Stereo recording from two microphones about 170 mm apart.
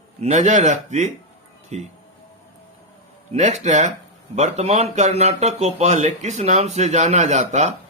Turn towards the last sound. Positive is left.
turn(degrees=-40)  # may be behind; listen again after turning